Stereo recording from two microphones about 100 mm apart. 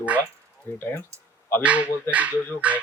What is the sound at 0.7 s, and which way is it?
Speech, 25° left (ahead or behind).